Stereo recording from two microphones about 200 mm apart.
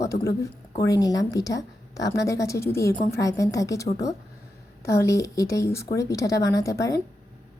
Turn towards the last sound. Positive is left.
turn(degrees=15)  # may be behind; listen again after turning